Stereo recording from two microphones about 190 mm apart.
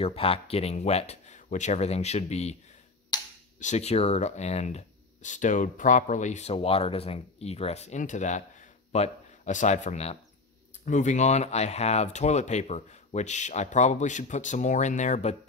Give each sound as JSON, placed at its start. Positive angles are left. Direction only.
{"t": 0.0, "sound": "speech", "side_deg": 30}
{"t": 3.5, "sound": "speech", "side_deg": 35}